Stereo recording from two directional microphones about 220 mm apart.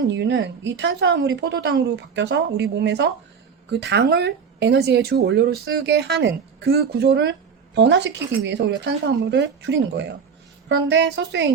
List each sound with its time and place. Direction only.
0.1 s speech: 55° right (ahead or behind)